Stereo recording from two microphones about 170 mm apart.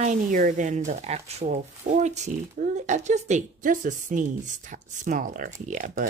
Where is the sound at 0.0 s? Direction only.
50° right (ahead or behind).